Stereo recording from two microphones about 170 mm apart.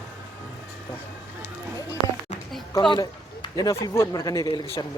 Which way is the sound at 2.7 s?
25° left (ahead or behind).